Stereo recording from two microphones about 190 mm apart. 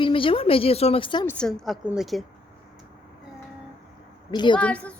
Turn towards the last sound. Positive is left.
turn(degrees=5)  # may be behind; listen again after turning